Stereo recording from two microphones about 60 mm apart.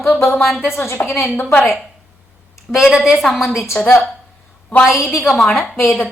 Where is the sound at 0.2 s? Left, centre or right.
Left.